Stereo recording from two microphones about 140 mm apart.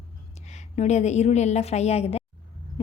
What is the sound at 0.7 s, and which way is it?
A woman's voice, 50° left (ahead or behind).